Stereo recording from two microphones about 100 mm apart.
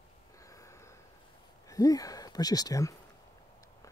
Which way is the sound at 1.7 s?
35° left (ahead or behind).